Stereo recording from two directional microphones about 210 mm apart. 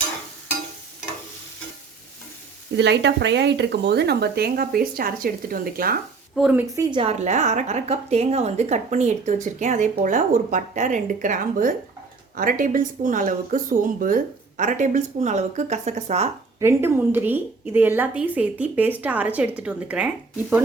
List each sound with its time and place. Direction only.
2.7 s speech: 55° right (ahead or behind)
6.3 s a woman's voice: 5° right (ahead or behind)
6.9 s a woman's voice: 30° right (ahead or behind)
16.6 s a woman's voice: 10° right (ahead or behind)